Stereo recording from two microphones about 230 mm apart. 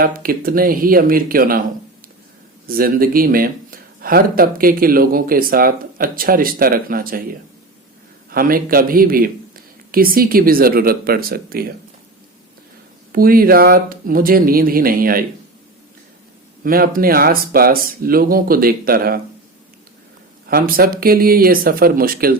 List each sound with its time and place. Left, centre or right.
0.0 s speech: right
2.6 s speech: right
8.3 s speech: right
13.1 s speech: right
16.6 s speech: right
20.5 s speech: right